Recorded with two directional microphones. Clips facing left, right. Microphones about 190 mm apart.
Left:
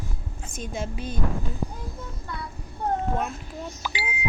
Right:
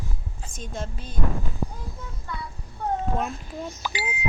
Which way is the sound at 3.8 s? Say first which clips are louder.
Right 1 dB; 45° right (ahead or behind).